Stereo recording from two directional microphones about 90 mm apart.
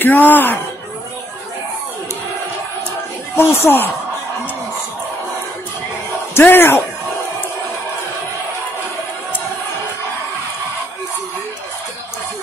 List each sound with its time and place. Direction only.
0.0 s speech: 20° left (ahead or behind)
3.3 s speech: 25° left (ahead or behind)
6.3 s speech: 25° left (ahead or behind)